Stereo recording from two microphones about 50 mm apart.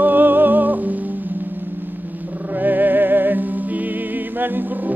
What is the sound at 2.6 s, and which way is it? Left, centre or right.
Music, right.